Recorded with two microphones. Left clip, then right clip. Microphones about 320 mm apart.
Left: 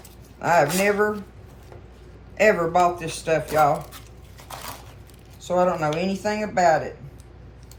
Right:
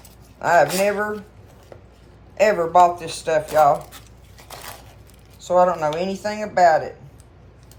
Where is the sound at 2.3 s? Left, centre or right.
Centre.